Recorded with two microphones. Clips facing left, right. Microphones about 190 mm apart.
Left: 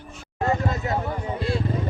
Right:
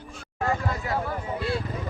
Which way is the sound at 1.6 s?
25° left (ahead or behind).